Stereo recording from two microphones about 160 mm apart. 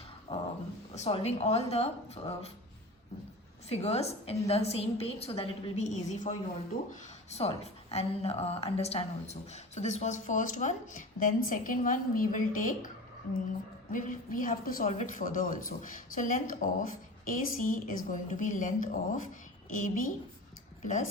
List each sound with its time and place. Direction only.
0.3 s a sound: 25° left (ahead or behind)
0.9 s a woman's voice: 40° left (ahead or behind)
3.7 s a woman's voice: 40° left (ahead or behind); by 12.9 s 55° left (ahead or behind)
13.9 s a woman's voice: 55° left (ahead or behind)